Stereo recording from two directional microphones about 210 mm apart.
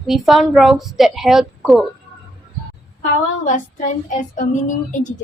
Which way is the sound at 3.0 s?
35° left (ahead or behind).